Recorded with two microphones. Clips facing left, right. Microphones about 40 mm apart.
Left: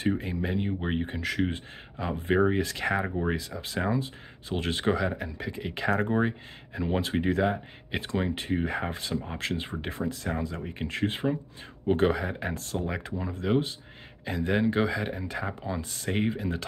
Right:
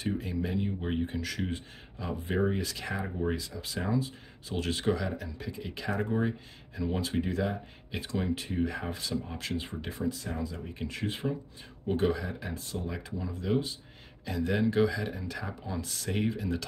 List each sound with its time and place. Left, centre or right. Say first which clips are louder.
0.0 s speech: left 4 dB; left